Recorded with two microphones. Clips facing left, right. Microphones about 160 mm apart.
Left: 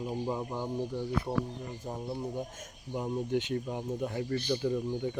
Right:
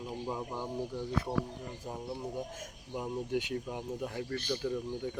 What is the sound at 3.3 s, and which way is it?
Speech, 5° right (ahead or behind).